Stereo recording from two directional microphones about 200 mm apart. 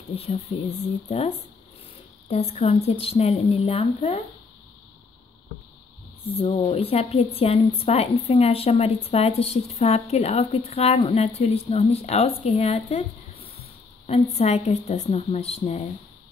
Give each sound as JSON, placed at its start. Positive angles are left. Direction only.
{"t": 0.1, "sound": "a woman's voice", "side_deg": 30}
{"t": 6.3, "sound": "a woman's voice", "side_deg": 30}